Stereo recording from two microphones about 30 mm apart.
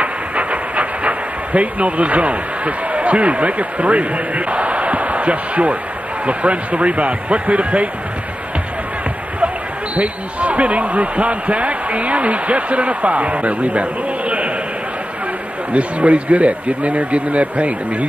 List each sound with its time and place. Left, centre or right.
0.0 s train: right
6.2 s speech: right
9.9 s speech: right
15.7 s speech: right